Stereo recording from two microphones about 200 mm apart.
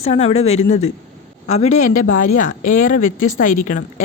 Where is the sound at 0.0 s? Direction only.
30° left (ahead or behind).